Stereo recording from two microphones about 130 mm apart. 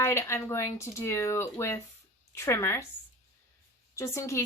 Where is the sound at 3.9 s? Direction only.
20° left (ahead or behind).